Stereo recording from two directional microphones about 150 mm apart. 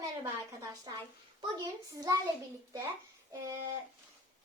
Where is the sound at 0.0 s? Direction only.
25° right (ahead or behind).